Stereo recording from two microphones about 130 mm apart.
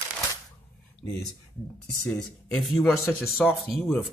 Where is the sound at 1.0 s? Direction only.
10° left (ahead or behind).